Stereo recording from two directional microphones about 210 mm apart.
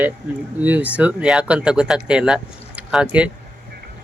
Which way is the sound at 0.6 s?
5° right (ahead or behind).